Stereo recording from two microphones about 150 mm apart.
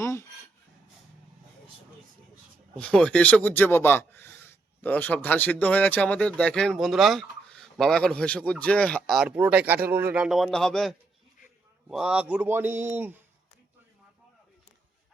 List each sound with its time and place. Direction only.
0.0 s a sound: 20° left (ahead or behind)
2.7 s speech: 5° left (ahead or behind)
9.3 s a man's voice: 10° right (ahead or behind)